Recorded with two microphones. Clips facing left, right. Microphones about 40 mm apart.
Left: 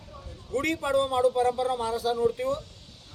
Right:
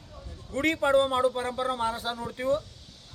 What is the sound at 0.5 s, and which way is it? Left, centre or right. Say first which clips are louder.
A man's voice: right 2 dB; right.